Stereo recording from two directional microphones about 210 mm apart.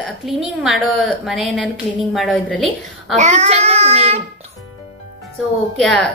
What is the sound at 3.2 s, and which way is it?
Speech, 30° right (ahead or behind).